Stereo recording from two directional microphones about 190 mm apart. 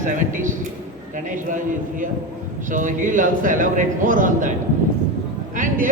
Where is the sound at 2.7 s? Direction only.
40° right (ahead or behind).